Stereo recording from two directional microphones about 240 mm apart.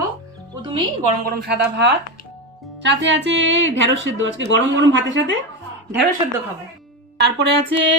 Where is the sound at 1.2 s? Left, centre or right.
Right.